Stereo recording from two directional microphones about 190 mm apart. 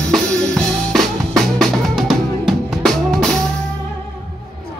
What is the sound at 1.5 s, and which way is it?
Drum, centre (ahead or behind).